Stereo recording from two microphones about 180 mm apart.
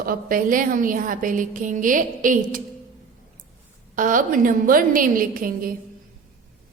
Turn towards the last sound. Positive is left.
turn(degrees=-50)  # may be behind; listen again after turning